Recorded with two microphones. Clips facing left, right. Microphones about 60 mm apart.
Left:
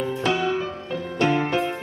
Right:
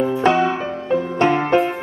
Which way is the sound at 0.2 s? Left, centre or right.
Right.